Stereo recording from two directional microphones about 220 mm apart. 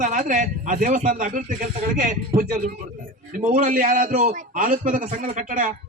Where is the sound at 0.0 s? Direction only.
35° right (ahead or behind).